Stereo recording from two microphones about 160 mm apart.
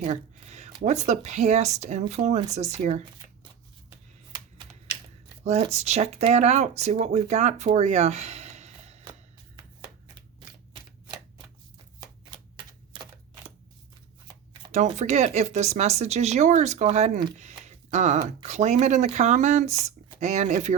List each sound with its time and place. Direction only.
0.0 s speech: 45° right (ahead or behind)
5.7 s speech: 45° right (ahead or behind)
7.7 s a sound: 45° right (ahead or behind)
12.9 s typewriter: 30° right (ahead or behind)
14.9 s speech: 45° right (ahead or behind)